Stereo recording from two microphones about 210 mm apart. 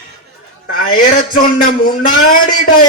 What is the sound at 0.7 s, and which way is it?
A man's voice, 45° left (ahead or behind).